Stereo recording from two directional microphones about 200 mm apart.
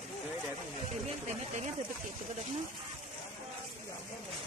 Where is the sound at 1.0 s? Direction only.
35° right (ahead or behind).